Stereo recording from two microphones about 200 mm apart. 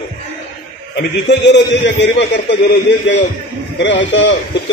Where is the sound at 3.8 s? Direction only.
65° left (ahead or behind).